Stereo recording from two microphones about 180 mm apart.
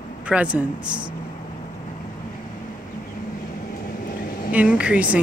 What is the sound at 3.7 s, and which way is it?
Vehicle, 50° left (ahead or behind).